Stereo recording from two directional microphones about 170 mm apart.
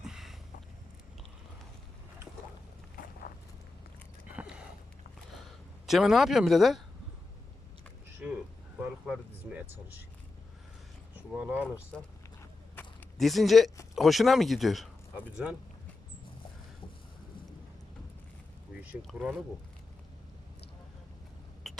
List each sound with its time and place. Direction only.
0.0 s a sound: centre (ahead or behind)
3.0 s walk: 55° left (ahead or behind)
4.3 s a sound: 5° right (ahead or behind)
5.8 s speech: centre (ahead or behind)
8.2 s a sound: 10° right (ahead or behind)
8.8 s speech: 5° right (ahead or behind)
11.3 s speech: 10° right (ahead or behind)
11.9 s speech: 5° left (ahead or behind)
12.4 s walk: 10° left (ahead or behind)
13.1 s speech: centre (ahead or behind)
18.8 s speech: 5° right (ahead or behind)
21.7 s a sound: centre (ahead or behind)